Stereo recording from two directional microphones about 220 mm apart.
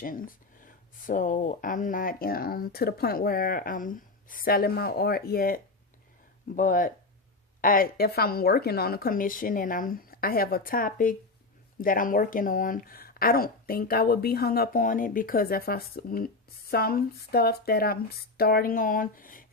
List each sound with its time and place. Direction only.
0.0 s speech: 40° left (ahead or behind)
6.6 s speech: 35° left (ahead or behind)